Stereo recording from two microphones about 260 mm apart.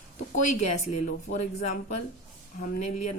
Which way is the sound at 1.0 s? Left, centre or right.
Left.